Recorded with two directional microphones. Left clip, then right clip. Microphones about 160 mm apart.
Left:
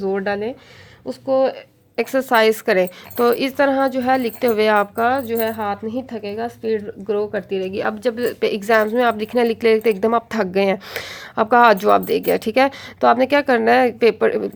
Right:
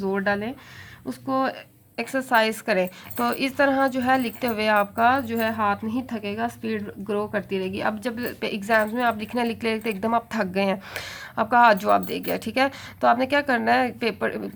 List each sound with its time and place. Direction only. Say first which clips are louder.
0.0 s speech: left 4 dB; 20° left (ahead or behind)
2.0 s a woman's voice: left 5 dB; 30° left (ahead or behind)